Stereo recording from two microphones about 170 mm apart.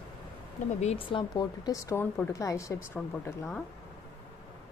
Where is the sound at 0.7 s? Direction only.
35° left (ahead or behind); by 3.6 s 15° left (ahead or behind).